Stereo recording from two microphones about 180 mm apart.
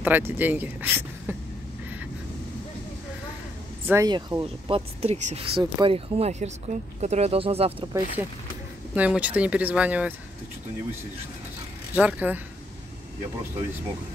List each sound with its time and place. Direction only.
0.0 s speech: 10° right (ahead or behind)
3.8 s speech: 15° right (ahead or behind)
4.1 s speech: 25° right (ahead or behind)
8.9 s speech: 10° right (ahead or behind)
11.9 s speech: 5° right (ahead or behind)